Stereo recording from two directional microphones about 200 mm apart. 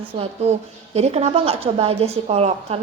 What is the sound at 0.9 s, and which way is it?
A woman's voice, 30° right (ahead or behind).